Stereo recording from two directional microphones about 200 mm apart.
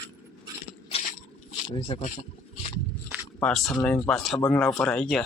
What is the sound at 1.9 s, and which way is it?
Speech, 25° left (ahead or behind).